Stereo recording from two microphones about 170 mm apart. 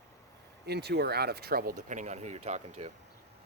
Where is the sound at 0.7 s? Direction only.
75° right (ahead or behind).